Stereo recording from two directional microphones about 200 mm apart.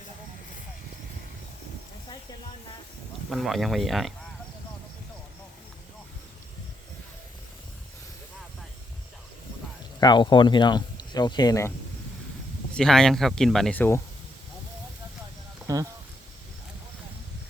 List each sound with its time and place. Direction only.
3.2 s speech: centre (ahead or behind)
10.0 s speech: 20° left (ahead or behind)
12.7 s speech: 5° left (ahead or behind)
15.6 s a sound: 15° right (ahead or behind)